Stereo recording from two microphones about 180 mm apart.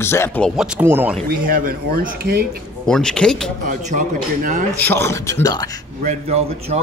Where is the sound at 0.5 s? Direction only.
5° right (ahead or behind).